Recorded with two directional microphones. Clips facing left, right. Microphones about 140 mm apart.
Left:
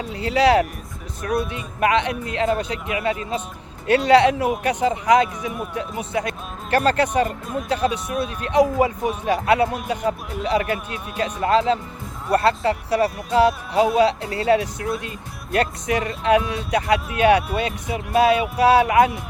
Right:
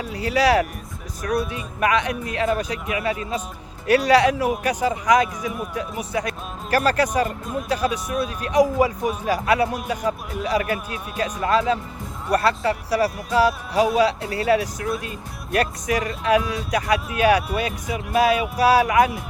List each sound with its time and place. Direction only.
0.1 s speech: 25° left (ahead or behind)